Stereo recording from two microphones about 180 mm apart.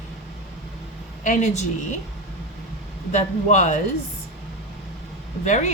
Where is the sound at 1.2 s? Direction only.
40° left (ahead or behind).